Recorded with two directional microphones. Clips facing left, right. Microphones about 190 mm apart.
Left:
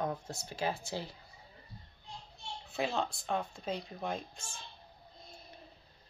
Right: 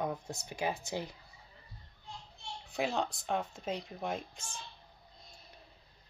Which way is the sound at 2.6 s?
15° right (ahead or behind).